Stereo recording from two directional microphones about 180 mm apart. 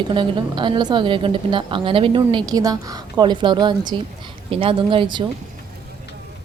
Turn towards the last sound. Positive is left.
turn(degrees=-25)  # may be behind; listen again after turning